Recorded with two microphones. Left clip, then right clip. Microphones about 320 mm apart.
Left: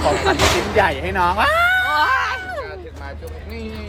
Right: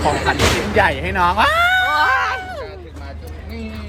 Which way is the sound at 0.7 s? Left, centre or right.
Centre.